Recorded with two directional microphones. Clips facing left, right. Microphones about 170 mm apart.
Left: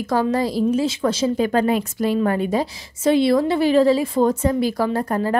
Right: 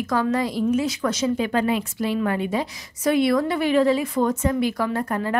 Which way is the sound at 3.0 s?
30° left (ahead or behind).